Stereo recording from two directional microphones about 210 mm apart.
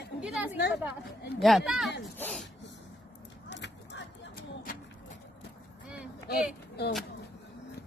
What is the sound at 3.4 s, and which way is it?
Clip-clop, 55° left (ahead or behind).